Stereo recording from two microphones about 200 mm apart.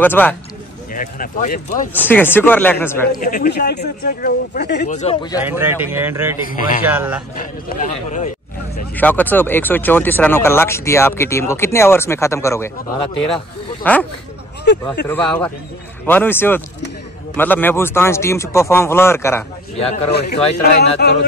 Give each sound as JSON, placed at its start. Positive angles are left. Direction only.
{"t": 0.0, "sound": "speech", "side_deg": 10}
{"t": 0.9, "sound": "speech", "side_deg": 40}
{"t": 2.0, "sound": "speech", "side_deg": 10}
{"t": 3.1, "sound": "speech", "side_deg": 45}
{"t": 4.8, "sound": "speech", "side_deg": 35}
{"t": 5.4, "sound": "speech", "side_deg": -10}
{"t": 6.5, "sound": "speech", "side_deg": 40}
{"t": 6.8, "sound": "speech", "side_deg": -10}
{"t": 7.3, "sound": "speech", "side_deg": 40}
{"t": 8.9, "sound": "speech", "side_deg": 10}
{"t": 13.9, "sound": "speech", "side_deg": 10}
{"t": 15.0, "sound": "speech", "side_deg": 10}
{"t": 19.8, "sound": "speech", "side_deg": 30}
{"t": 20.1, "sound": "speech", "side_deg": 55}